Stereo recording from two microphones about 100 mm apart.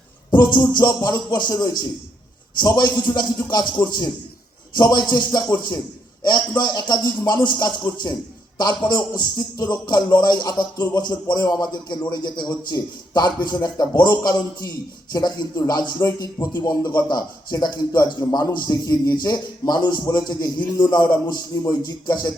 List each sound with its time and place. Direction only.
0.3 s a man's voice: 45° left (ahead or behind)